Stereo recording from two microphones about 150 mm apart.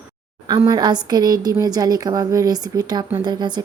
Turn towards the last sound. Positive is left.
turn(degrees=-30)  # may be behind; listen again after turning